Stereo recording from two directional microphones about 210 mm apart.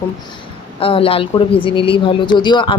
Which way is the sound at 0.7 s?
25° left (ahead or behind).